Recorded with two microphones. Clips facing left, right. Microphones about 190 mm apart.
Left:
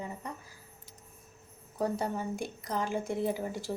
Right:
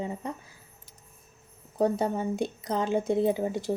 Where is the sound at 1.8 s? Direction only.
20° right (ahead or behind).